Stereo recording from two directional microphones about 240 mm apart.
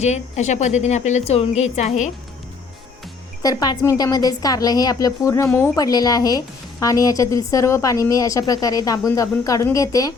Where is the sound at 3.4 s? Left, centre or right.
Centre.